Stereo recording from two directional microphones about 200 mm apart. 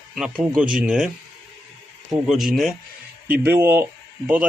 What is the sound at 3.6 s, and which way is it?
Speech, 10° right (ahead or behind).